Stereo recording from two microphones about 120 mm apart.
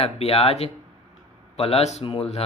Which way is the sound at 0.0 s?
60° left (ahead or behind).